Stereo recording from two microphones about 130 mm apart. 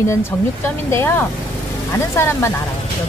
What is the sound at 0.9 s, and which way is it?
Speech, 20° left (ahead or behind).